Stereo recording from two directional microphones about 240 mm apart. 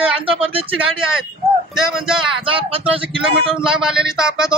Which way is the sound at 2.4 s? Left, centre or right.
Right.